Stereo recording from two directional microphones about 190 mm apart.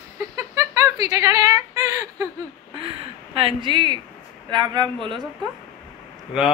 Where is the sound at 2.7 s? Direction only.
30° right (ahead or behind).